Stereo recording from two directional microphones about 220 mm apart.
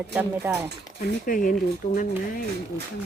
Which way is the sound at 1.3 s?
40° left (ahead or behind).